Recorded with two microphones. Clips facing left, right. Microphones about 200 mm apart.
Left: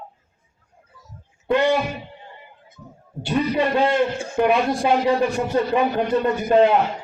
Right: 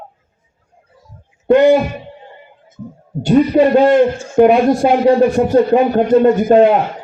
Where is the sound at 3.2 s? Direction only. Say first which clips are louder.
Right 10 dB; 45° right (ahead or behind).